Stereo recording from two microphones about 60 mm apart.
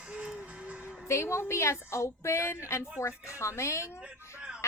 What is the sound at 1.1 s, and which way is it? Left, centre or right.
A child's voice, left.